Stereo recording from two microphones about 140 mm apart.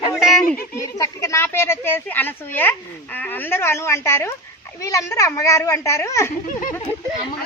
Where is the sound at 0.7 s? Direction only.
20° left (ahead or behind).